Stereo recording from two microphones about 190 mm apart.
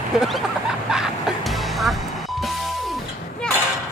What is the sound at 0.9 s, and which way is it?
Music, centre (ahead or behind).